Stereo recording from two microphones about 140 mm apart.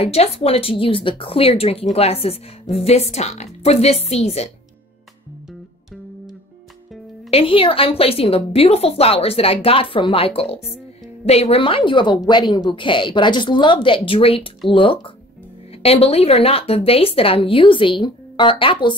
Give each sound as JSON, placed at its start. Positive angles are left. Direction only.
{"t": 0.0, "sound": "a woman's voice", "side_deg": 45}
{"t": 7.2, "sound": "a woman's voice", "side_deg": 45}